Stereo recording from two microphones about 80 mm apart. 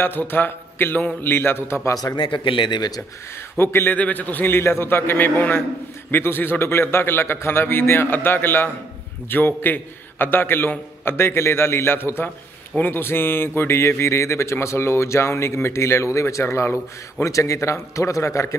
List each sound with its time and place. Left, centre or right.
0.0 s a man's voice: left
2.1 s a man's voice: left
3.5 s a man's voice: left